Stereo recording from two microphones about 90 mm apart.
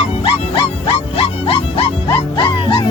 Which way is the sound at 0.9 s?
90° left.